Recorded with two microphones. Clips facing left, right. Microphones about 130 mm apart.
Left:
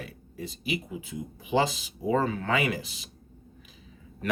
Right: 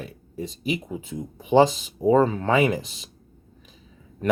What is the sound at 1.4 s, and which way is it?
Speech, 35° right (ahead or behind).